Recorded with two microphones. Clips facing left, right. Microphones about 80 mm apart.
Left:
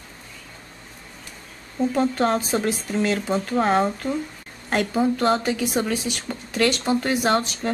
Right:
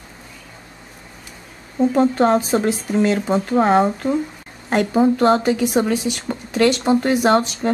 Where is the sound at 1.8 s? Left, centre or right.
Centre.